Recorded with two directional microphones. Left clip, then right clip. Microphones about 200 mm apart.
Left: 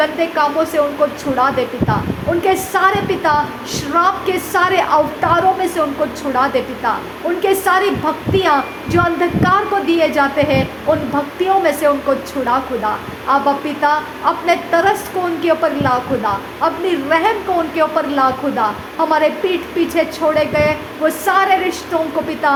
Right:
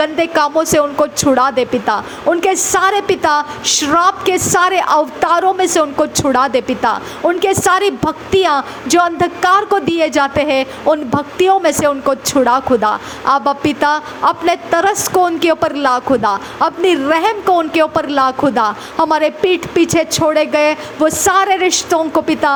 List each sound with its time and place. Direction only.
0.0 s a woman's voice: 35° right (ahead or behind)